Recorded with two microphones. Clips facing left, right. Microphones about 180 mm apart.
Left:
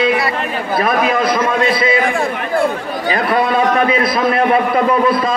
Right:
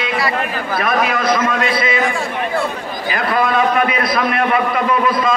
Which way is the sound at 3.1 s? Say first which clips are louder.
Left 1 dB; 30° left (ahead or behind).